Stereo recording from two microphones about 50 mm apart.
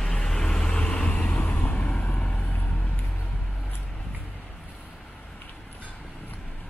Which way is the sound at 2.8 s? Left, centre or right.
Left.